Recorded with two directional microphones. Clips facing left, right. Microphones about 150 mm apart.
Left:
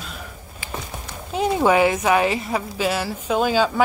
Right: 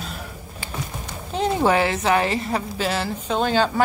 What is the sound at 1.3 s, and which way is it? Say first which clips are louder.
A woman's voice: left 1 dB; 10° left (ahead or behind).